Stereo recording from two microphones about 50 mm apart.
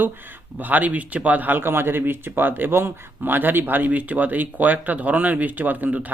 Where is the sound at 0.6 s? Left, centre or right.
Right.